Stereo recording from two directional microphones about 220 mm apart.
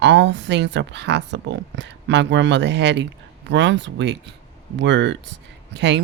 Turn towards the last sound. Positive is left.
turn(degrees=-50)  # may be behind; listen again after turning